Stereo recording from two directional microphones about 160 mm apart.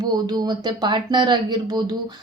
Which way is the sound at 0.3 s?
25° right (ahead or behind).